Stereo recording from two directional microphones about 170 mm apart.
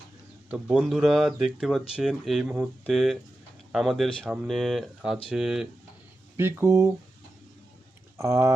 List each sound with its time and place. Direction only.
0.5 s speech: 5° right (ahead or behind)
6.3 s speech: 15° right (ahead or behind)
8.2 s speech: 15° right (ahead or behind)